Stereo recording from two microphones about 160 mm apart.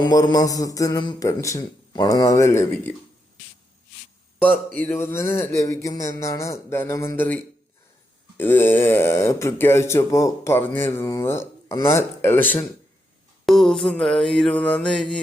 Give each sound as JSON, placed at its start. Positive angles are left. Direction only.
{"t": 0.0, "sound": "a man's voice", "side_deg": 25}
{"t": 4.9, "sound": "speech", "side_deg": 15}
{"t": 13.4, "sound": "mantra", "side_deg": 0}